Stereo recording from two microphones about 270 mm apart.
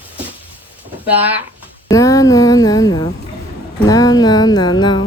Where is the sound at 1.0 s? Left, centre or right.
Centre.